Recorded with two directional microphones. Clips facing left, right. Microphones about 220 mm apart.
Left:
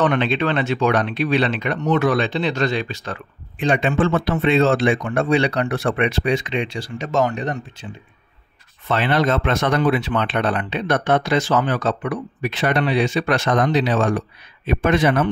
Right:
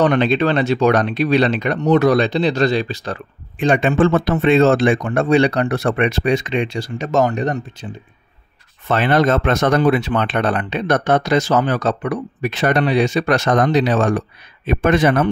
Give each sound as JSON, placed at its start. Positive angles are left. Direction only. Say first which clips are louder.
{"t": 0.0, "sound": "speech", "louder": "right 4 dB", "side_deg": -40}
{"t": 8.8, "sound": "speech", "louder": "right 4 dB", "side_deg": -45}